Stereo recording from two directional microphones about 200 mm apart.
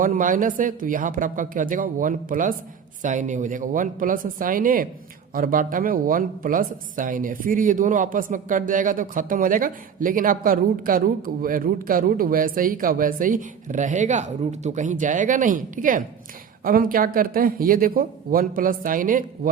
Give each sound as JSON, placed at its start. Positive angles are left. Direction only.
{"t": 0.0, "sound": "a woman's voice", "side_deg": -40}